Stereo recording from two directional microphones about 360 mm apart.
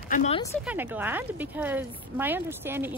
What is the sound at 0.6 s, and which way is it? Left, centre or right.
Speech, centre.